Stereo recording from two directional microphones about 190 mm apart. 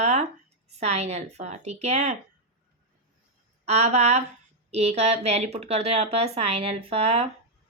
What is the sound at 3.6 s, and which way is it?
Speech, 35° right (ahead or behind).